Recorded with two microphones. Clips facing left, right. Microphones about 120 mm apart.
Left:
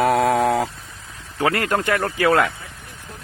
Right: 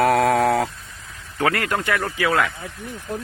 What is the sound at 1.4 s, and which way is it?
Speech, 30° left (ahead or behind).